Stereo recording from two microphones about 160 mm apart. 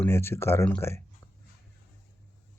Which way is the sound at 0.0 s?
15° left (ahead or behind).